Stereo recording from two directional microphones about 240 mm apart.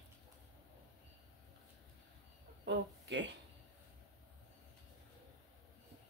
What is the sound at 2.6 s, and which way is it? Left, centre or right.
Speech, right.